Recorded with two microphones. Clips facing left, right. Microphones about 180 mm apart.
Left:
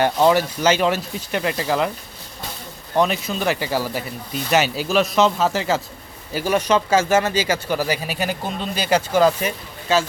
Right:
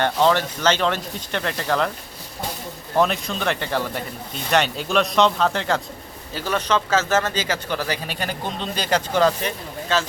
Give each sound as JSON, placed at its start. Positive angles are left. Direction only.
{"t": 0.0, "sound": "speech", "side_deg": 10}
{"t": 2.9, "sound": "speech", "side_deg": 0}